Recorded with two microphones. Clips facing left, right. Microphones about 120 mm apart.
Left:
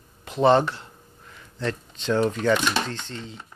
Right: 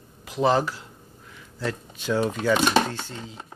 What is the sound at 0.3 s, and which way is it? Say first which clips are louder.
Speech: left 3 dB; centre (ahead or behind).